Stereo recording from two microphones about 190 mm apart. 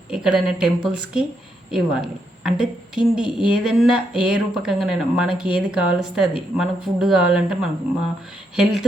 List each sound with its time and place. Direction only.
0.1 s a woman's voice: 5° right (ahead or behind)